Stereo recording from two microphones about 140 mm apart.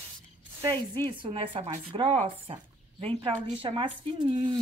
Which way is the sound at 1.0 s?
40° right (ahead or behind).